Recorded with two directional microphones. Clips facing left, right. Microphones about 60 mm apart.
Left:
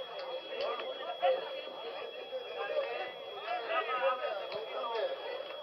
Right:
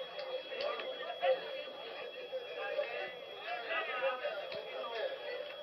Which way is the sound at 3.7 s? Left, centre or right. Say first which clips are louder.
Left 4 dB; centre.